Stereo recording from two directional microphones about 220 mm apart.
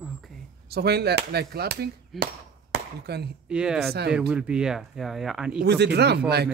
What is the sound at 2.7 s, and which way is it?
Speech, 45° right (ahead or behind).